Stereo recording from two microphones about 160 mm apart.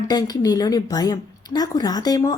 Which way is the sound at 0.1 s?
25° left (ahead or behind).